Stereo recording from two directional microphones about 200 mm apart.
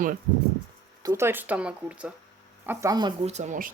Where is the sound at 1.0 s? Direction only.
15° right (ahead or behind).